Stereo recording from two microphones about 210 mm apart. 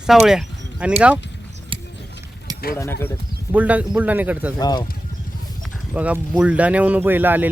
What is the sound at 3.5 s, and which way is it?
Speech, 5° right (ahead or behind).